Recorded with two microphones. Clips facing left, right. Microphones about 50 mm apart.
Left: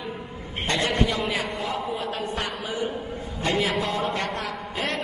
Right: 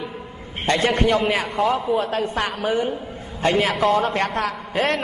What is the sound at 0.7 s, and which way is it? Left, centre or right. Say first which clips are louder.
Speech: right 6 dB; right.